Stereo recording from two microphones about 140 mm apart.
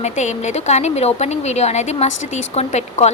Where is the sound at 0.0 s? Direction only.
55° left (ahead or behind).